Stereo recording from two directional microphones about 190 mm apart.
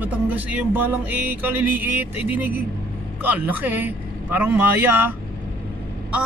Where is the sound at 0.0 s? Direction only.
10° right (ahead or behind).